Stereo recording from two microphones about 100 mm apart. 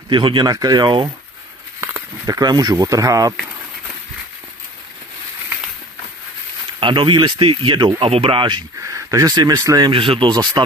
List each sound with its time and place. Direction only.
0.1 s speech: 55° right (ahead or behind)
2.2 s speech: 40° right (ahead or behind)
6.8 s speech: 60° right (ahead or behind)
8.8 s speech: 35° right (ahead or behind)
9.9 s speech: 60° right (ahead or behind)